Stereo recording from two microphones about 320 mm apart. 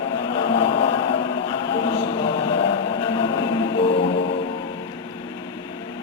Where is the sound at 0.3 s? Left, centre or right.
Centre.